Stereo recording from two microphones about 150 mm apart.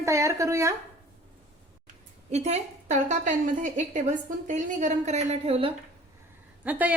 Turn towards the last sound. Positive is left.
turn(degrees=-10)  # may be behind; listen again after turning